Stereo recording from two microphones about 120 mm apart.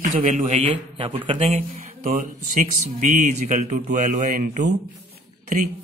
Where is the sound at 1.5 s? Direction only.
80° right.